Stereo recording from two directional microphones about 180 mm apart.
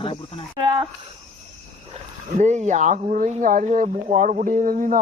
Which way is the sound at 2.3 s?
40° right (ahead or behind).